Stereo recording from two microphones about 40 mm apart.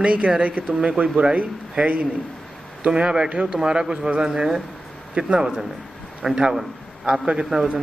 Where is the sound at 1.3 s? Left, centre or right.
Right; by 4.6 s centre.